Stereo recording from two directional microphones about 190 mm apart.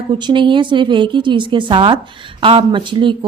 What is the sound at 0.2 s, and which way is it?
Speech, 25° right (ahead or behind).